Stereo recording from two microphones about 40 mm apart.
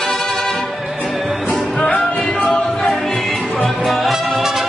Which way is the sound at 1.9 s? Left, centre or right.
Left.